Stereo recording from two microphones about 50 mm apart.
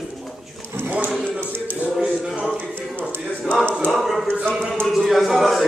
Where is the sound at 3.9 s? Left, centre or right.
Centre.